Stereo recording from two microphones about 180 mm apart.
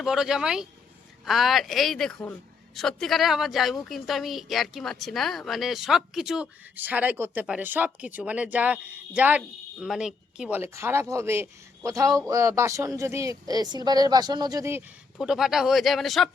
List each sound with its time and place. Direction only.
0.0 s a woman's voice: centre (ahead or behind)
15.2 s a woman's voice: centre (ahead or behind)